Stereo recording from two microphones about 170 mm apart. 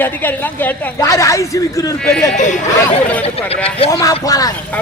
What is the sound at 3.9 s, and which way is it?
Speech, 20° left (ahead or behind).